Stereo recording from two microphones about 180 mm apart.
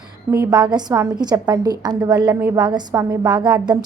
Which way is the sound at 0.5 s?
25° right (ahead or behind).